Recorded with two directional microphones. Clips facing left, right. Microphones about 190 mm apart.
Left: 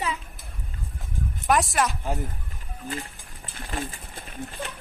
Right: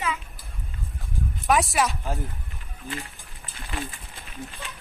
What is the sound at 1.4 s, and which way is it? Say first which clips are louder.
Speech: even; centre (ahead or behind).